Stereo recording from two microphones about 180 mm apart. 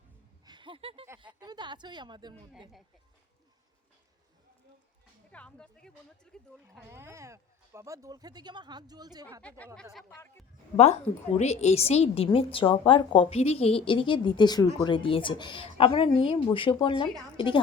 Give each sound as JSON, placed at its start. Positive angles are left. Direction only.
{"t": 0.4, "sound": "a sound", "side_deg": -25}
{"t": 1.4, "sound": "speech", "side_deg": -25}
{"t": 5.3, "sound": "speech", "side_deg": 5}
{"t": 6.9, "sound": "speech", "side_deg": -15}
{"t": 9.4, "sound": "speech", "side_deg": 10}
{"t": 10.8, "sound": "a woman's voice", "side_deg": 40}